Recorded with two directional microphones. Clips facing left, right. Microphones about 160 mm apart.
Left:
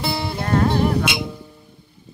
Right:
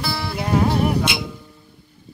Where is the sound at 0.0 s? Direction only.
25° left (ahead or behind).